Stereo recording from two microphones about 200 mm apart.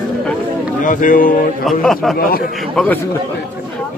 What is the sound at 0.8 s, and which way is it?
Speech, 40° left (ahead or behind).